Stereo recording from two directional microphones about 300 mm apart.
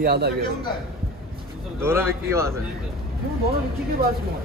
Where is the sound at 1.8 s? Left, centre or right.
Centre.